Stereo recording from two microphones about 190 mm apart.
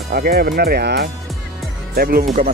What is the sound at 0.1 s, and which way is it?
Speech, 55° right (ahead or behind).